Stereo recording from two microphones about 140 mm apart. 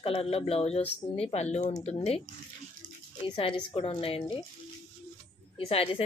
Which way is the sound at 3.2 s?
40° left (ahead or behind).